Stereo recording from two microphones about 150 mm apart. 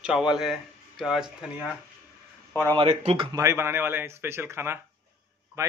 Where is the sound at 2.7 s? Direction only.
35° right (ahead or behind).